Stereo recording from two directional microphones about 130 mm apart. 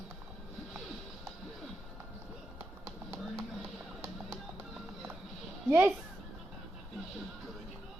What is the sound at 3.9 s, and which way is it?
Music, 5° right (ahead or behind).